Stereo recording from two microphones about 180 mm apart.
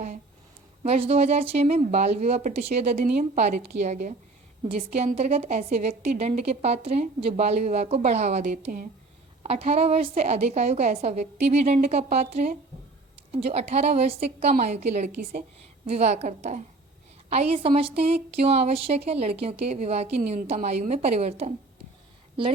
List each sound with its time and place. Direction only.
0.8 s a woman's voice: 35° right (ahead or behind)
8.6 s speech: 50° right (ahead or behind)
9.4 s a woman's voice: 35° right (ahead or behind)
15.1 s a woman's voice: 55° right (ahead or behind)
15.9 s a woman's voice: 35° right (ahead or behind)